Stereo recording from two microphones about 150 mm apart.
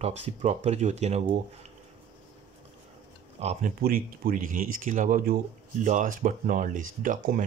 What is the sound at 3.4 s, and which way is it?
Speech, 50° right (ahead or behind).